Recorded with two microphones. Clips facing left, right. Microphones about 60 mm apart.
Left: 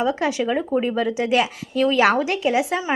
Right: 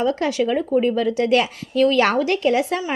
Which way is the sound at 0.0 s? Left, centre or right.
Centre.